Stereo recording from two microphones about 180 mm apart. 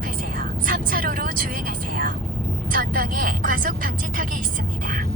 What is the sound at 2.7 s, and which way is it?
Speech, 50° right (ahead or behind).